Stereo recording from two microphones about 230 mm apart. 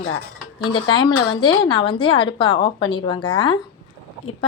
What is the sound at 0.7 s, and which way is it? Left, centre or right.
Speech, centre.